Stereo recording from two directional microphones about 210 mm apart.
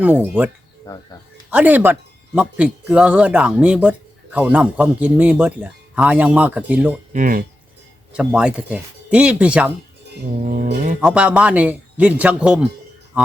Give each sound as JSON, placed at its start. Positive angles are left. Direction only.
{"t": 0.0, "sound": "speech", "side_deg": -10}
{"t": 7.1, "sound": "speech", "side_deg": -40}
{"t": 8.1, "sound": "speech", "side_deg": -5}
{"t": 10.4, "sound": "speech", "side_deg": -40}
{"t": 11.0, "sound": "speech", "side_deg": -5}